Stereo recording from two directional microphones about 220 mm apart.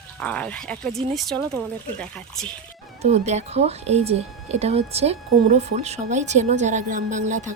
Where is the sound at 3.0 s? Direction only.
30° right (ahead or behind).